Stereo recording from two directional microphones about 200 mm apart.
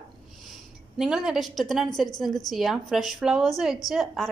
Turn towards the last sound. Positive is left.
turn(degrees=0)  # may be behind; listen again after turning